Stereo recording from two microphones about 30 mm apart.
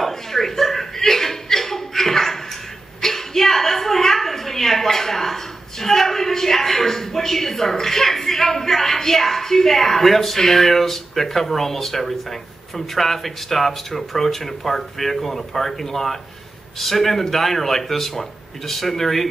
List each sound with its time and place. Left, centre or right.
0.0 s chuckle: centre
3.0 s a woman's voice: centre